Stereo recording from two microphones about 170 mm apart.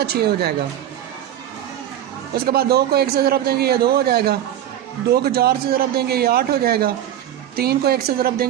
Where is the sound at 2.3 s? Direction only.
60° right (ahead or behind).